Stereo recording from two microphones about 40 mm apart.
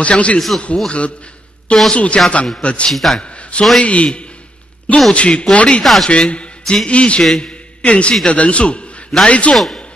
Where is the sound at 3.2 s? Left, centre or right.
Left.